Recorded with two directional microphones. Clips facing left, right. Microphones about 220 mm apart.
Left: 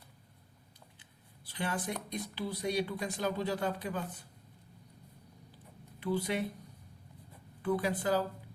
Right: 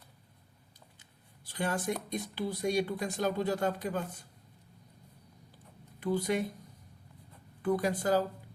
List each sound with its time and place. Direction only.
1.5 s speech: 45° right (ahead or behind)
6.0 s speech: 45° right (ahead or behind)
7.6 s speech: 45° right (ahead or behind)